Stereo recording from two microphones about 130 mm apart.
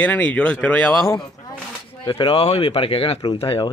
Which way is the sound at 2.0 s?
45° left (ahead or behind).